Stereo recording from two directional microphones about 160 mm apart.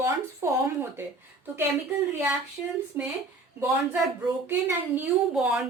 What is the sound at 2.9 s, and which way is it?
Speech, 15° right (ahead or behind).